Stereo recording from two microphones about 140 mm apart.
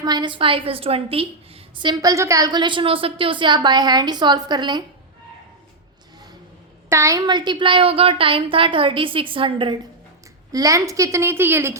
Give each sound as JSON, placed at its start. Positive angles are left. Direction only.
{"t": 0.0, "sound": "a woman's voice", "side_deg": -30}
{"t": 6.9, "sound": "a woman's voice", "side_deg": -20}
{"t": 10.5, "sound": "a woman's voice", "side_deg": -25}